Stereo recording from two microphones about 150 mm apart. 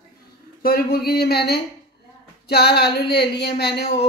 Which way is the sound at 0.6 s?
85° left.